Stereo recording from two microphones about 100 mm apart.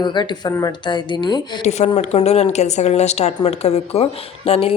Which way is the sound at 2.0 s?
90° left.